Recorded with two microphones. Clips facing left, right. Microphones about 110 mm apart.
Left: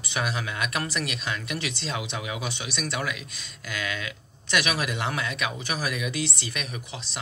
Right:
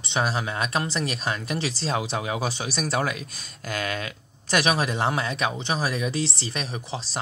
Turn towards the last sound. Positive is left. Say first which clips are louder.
# right 5 dB
turn(degrees=-35)  # may be behind; listen again after turning